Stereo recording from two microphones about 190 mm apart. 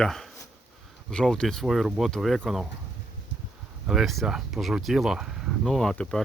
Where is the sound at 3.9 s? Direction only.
Centre (ahead or behind).